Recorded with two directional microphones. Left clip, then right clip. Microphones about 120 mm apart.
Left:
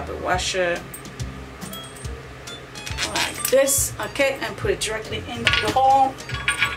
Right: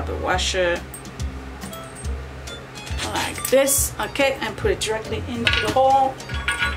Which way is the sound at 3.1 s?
Centre (ahead or behind).